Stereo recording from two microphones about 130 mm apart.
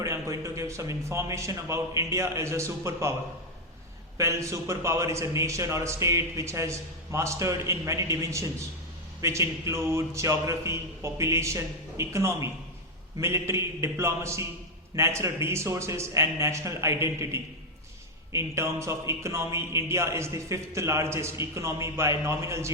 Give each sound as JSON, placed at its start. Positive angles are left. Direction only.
{"t": 0.0, "sound": "speech", "side_deg": -20}
{"t": 4.2, "sound": "speech", "side_deg": -20}